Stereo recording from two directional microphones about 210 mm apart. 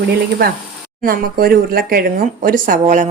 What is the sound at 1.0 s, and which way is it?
A woman's voice, 45° right (ahead or behind).